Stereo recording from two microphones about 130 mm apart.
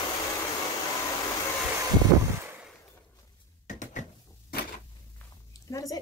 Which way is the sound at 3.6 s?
70° left (ahead or behind).